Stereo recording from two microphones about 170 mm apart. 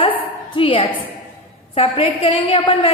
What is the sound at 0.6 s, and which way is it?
A woman's voice, 30° left (ahead or behind).